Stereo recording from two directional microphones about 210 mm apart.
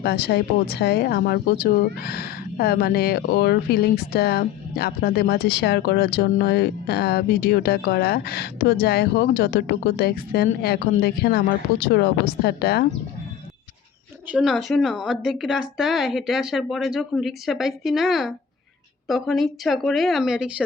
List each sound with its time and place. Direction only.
0.0 s speech: 50° left (ahead or behind)
14.3 s speech: 5° right (ahead or behind)